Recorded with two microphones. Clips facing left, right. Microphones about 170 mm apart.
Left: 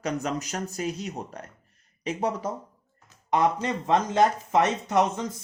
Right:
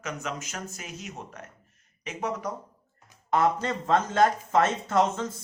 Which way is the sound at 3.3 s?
15° left (ahead or behind).